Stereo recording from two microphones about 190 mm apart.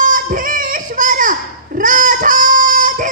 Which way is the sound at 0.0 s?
45° right (ahead or behind).